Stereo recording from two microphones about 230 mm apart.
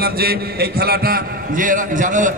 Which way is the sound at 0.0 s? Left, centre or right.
Right.